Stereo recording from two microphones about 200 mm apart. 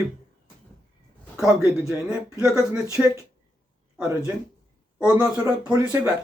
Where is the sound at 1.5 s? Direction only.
15° right (ahead or behind).